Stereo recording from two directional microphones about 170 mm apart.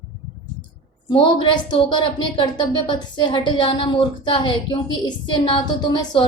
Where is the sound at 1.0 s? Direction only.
30° left (ahead or behind).